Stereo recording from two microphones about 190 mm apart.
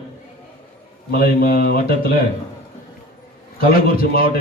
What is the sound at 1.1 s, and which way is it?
Speech, 50° left (ahead or behind).